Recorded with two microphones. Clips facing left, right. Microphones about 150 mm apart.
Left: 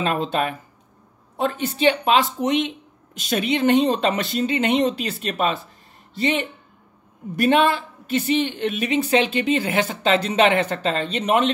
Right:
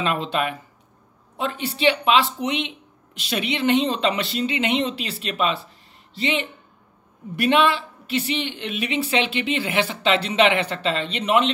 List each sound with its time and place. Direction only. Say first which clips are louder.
0.0 s speech: left 1 dB; 40° left (ahead or behind)